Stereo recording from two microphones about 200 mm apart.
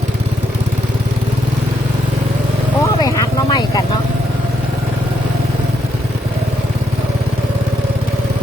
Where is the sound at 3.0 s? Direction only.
20° left (ahead or behind).